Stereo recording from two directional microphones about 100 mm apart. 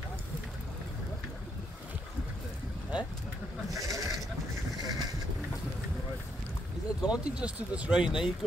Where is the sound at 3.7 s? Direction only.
35° right (ahead or behind).